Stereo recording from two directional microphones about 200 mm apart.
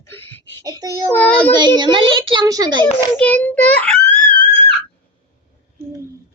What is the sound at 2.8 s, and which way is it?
A child's voice, 5° left (ahead or behind).